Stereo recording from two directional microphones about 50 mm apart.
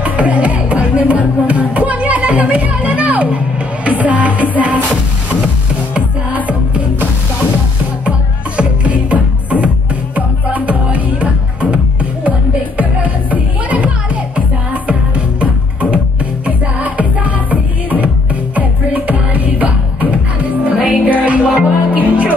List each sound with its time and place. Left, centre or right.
0.0 s music: right
5.9 s music: right
8.5 s music: right
16.4 s music: right